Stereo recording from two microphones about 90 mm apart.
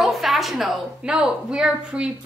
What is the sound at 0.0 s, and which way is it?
A woman's voice, centre (ahead or behind).